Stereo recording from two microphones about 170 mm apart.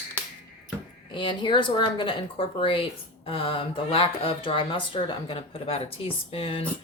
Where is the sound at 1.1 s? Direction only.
30° left (ahead or behind).